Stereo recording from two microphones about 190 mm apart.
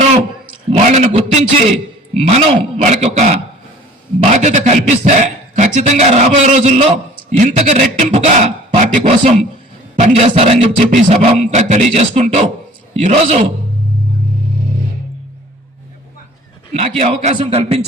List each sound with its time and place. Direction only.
0.7 s a man's voice: 40° right (ahead or behind)
17.0 s a man's voice: 35° right (ahead or behind)